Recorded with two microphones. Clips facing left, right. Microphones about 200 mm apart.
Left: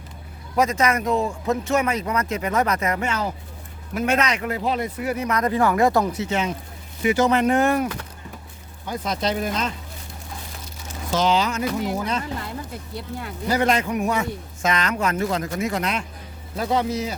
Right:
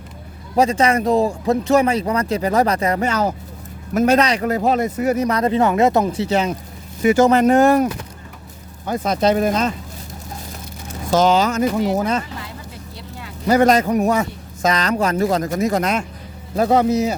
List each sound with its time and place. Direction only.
0.5 s speech: 30° right (ahead or behind)
8.9 s speech: 50° right (ahead or behind)
11.1 s speech: 45° right (ahead or behind)
13.5 s speech: 45° right (ahead or behind)